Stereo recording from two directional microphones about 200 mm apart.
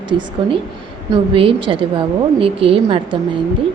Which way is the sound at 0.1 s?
25° right (ahead or behind).